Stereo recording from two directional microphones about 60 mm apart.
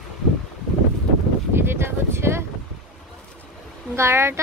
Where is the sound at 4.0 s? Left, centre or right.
Right.